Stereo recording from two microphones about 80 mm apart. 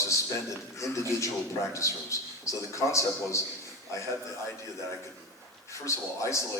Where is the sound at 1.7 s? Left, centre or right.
Left.